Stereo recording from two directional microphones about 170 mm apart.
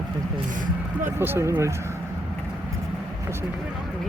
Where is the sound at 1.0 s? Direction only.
15° right (ahead or behind).